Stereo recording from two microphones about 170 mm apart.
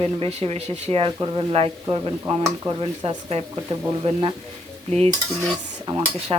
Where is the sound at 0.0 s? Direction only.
35° right (ahead or behind).